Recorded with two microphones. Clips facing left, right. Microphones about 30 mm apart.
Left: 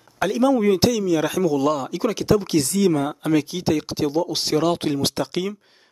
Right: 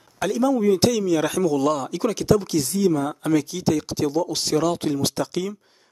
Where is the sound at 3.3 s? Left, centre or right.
Left.